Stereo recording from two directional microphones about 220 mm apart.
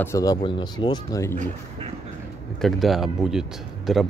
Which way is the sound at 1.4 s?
30° right (ahead or behind).